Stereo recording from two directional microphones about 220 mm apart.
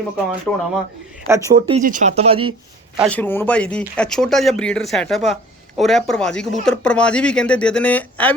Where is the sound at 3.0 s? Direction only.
5° left (ahead or behind).